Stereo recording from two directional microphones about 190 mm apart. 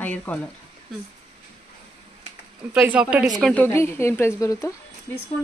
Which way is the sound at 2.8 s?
5° right (ahead or behind).